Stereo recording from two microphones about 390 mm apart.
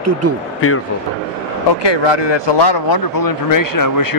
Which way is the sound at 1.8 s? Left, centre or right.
Left.